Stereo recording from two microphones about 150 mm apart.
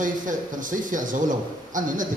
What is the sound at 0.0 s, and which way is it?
A man's voice, 60° right (ahead or behind).